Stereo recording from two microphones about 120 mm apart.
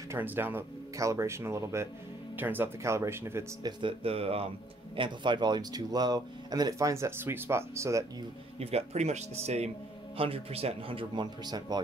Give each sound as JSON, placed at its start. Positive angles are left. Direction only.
{"t": 0.1, "sound": "speech", "side_deg": -15}
{"t": 3.6, "sound": "speech", "side_deg": -50}
{"t": 4.9, "sound": "speech", "side_deg": -40}
{"t": 8.5, "sound": "speech", "side_deg": -60}
{"t": 10.1, "sound": "speech", "side_deg": -50}